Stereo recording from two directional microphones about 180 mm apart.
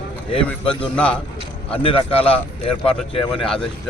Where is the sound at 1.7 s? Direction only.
30° left (ahead or behind).